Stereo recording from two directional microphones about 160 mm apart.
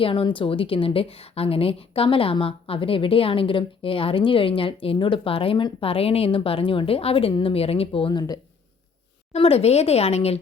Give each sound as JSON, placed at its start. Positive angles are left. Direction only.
{"t": 0.0, "sound": "a woman's voice", "side_deg": 35}